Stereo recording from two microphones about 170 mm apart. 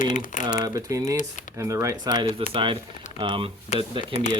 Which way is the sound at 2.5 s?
30° right (ahead or behind).